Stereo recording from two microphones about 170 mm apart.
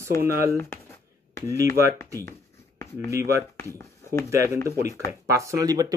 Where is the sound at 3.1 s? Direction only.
20° right (ahead or behind).